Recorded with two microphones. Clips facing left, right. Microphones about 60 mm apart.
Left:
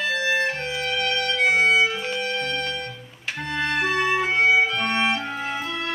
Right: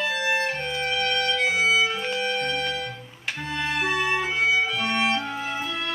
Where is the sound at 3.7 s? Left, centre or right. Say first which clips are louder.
Left 2 dB; centre.